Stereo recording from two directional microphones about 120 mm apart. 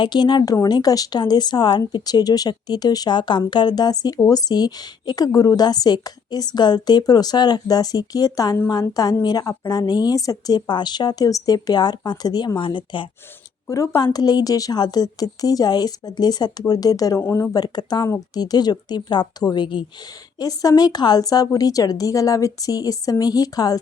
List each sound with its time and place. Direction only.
0.0 s speech: 40° left (ahead or behind)
13.7 s speech: 25° left (ahead or behind)
17.5 s speech: 35° left (ahead or behind)